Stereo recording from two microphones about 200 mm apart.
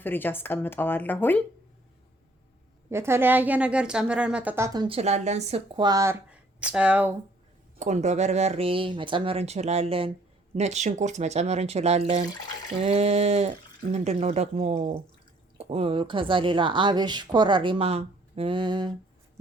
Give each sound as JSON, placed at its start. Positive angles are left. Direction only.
{"t": 0.0, "sound": "speech", "side_deg": 10}
{"t": 2.9, "sound": "a woman's voice", "side_deg": -15}
{"t": 6.6, "sound": "speech", "side_deg": -5}
{"t": 7.8, "sound": "speech", "side_deg": -35}